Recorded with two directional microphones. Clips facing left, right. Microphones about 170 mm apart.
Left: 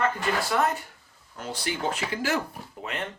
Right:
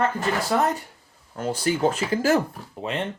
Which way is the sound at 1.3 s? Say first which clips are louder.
Right 8 dB; 45° right (ahead or behind).